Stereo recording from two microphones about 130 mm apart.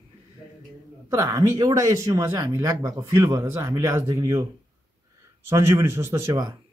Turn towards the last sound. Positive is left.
turn(degrees=-25)  # may be behind; listen again after turning